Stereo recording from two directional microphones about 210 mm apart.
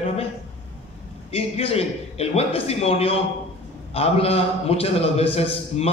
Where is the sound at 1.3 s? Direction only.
30° left (ahead or behind).